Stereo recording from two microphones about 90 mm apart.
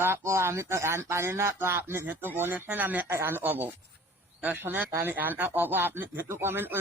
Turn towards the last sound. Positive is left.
turn(degrees=-25)  # may be behind; listen again after turning